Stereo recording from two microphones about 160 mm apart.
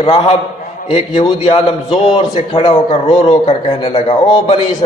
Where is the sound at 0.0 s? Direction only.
40° left (ahead or behind).